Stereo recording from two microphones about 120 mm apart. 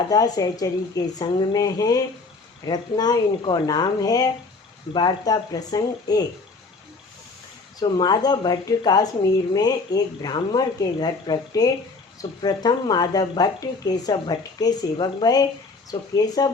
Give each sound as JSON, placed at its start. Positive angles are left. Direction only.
{"t": 0.1, "sound": "speech", "side_deg": 30}
{"t": 7.8, "sound": "speech", "side_deg": 35}